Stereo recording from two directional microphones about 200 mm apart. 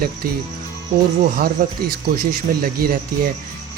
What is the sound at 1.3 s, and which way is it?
Speech, 45° right (ahead or behind).